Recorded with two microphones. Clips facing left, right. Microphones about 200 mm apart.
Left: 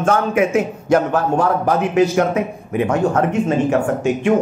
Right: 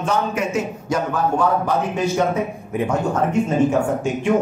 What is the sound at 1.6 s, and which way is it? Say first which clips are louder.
Speech: left 5 dB; 75° left (ahead or behind).